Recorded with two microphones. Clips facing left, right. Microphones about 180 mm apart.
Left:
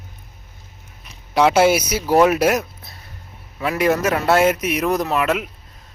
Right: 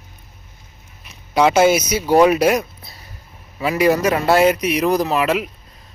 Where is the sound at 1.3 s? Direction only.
5° left (ahead or behind).